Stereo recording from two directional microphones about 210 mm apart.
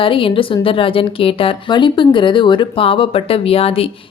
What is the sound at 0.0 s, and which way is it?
A woman's voice, 25° left (ahead or behind).